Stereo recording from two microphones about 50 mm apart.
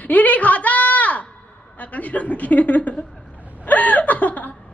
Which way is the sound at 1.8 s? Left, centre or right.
Left.